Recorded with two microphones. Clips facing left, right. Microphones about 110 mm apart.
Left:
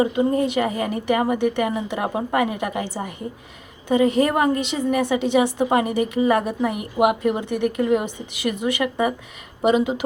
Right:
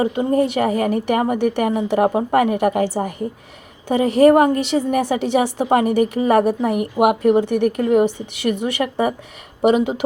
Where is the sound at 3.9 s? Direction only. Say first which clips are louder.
Right 5 dB; 40° right (ahead or behind).